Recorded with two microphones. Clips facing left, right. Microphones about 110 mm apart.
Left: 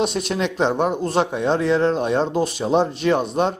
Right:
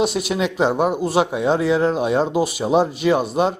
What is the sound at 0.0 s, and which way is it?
Speech, 5° right (ahead or behind).